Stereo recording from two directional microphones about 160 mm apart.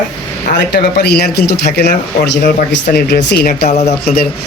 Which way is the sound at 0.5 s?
90° left.